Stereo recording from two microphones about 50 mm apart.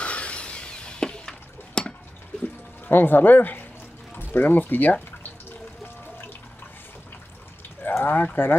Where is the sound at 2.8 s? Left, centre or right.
Left.